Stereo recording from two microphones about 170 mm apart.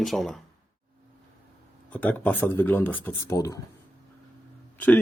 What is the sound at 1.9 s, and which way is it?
Speech, 10° left (ahead or behind).